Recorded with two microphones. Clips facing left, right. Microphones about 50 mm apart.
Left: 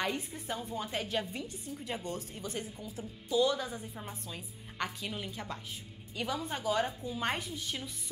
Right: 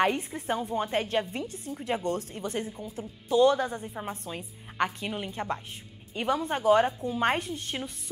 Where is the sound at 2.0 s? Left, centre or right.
Right.